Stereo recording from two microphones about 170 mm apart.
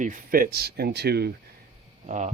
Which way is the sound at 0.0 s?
50° right (ahead or behind).